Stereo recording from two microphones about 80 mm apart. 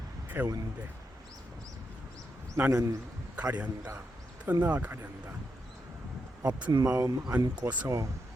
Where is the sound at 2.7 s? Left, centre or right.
Right.